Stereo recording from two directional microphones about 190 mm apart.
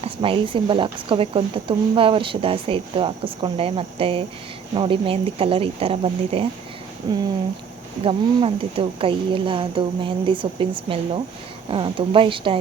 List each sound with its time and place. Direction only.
0.0 s a woman's voice: 30° right (ahead or behind)